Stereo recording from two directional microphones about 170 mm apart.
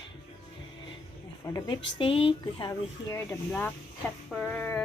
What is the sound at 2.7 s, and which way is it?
Speech, 15° left (ahead or behind).